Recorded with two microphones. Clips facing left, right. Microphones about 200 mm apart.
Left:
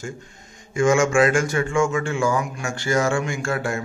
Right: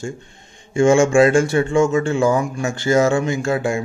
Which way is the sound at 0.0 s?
30° right (ahead or behind).